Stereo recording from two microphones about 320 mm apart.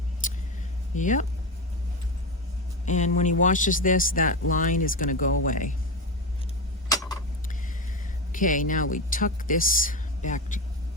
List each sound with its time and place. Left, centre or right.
0.2 s a sound: left
0.9 s speech: left
2.8 s speech: left
6.8 s clock: centre
8.3 s speech: left